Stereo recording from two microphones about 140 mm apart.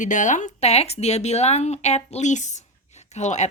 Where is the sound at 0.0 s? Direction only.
65° left (ahead or behind).